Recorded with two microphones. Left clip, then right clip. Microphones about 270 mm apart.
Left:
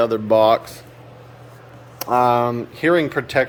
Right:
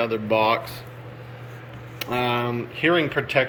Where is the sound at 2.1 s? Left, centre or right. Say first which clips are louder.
Left 9 dB; left.